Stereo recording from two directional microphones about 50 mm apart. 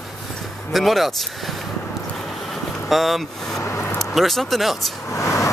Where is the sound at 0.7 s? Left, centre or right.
Centre.